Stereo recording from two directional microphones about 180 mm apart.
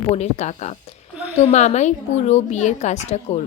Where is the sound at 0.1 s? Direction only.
40° left (ahead or behind).